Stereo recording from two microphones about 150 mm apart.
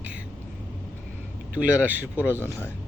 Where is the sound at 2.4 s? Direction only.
15° left (ahead or behind).